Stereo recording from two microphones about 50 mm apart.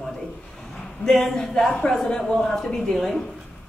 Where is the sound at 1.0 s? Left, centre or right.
Centre.